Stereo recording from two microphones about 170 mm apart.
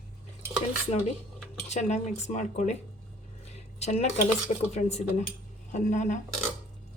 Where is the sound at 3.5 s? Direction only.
40° left (ahead or behind).